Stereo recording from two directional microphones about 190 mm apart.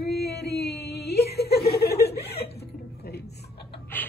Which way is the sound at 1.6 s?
55° left (ahead or behind).